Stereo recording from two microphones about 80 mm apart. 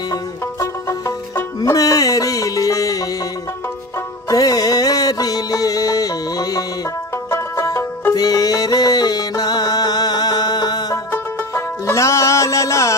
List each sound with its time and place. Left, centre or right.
1.6 s music: left
4.3 s music: left
7.2 s music: left
8.2 s music: left
11.1 s music: left